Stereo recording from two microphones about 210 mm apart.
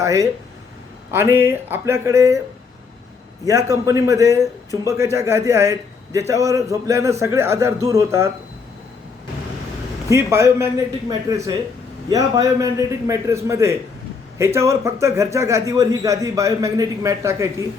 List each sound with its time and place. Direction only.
0.0 s a man's voice: 15° right (ahead or behind)
3.4 s a man's voice: 15° right (ahead or behind)
10.1 s a man's voice: 15° right (ahead or behind)